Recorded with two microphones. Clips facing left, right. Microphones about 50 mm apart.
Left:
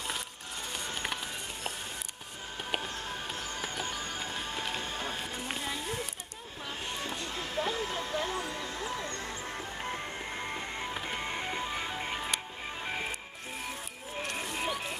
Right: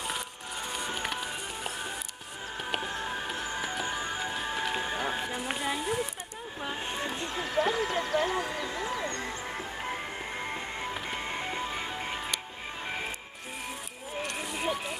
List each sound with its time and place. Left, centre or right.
0.7 s music: centre
1.0 s music: centre
2.8 s music: centre
8.0 s a sound: centre
8.6 s music: centre
14.3 s music: centre